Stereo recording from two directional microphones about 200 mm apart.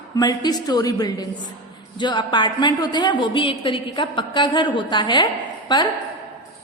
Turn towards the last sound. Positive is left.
turn(degrees=20)  # may be behind; listen again after turning